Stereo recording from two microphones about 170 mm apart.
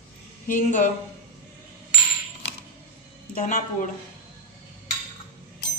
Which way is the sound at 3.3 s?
45° left (ahead or behind).